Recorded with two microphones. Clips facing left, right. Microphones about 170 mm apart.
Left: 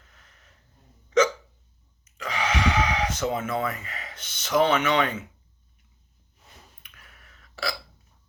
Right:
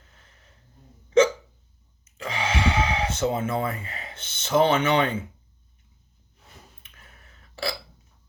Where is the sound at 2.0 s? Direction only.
25° right (ahead or behind).